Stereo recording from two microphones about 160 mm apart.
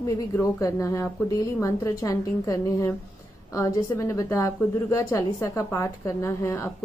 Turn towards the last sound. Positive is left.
turn(degrees=15)  # may be behind; listen again after turning